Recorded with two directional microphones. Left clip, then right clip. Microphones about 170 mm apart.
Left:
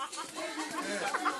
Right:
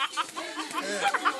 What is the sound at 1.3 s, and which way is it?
Music, 15° right (ahead or behind).